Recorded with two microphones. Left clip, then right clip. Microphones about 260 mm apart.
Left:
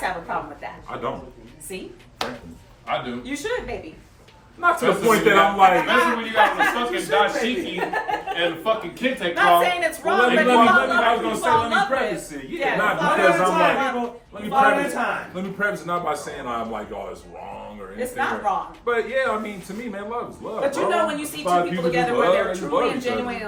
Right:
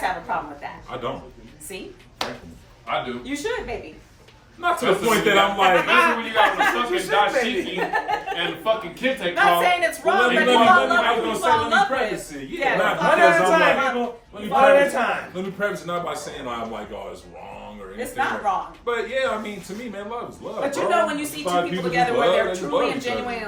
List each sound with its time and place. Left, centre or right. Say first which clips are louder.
0.0 s a man's voice: right 1 dB; centre
2.2 s a man's voice: even; centre
17.9 s a man's voice: even; centre